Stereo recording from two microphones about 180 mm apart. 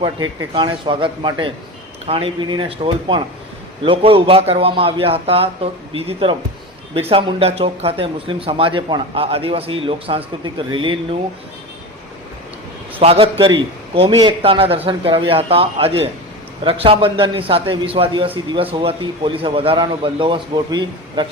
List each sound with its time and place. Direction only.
0.0 s a man's voice: 25° right (ahead or behind)
13.0 s a man's voice: 35° right (ahead or behind)